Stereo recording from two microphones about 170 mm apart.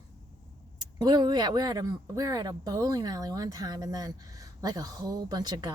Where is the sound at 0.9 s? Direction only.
25° right (ahead or behind).